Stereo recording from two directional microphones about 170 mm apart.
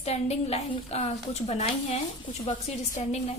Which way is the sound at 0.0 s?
40° left (ahead or behind).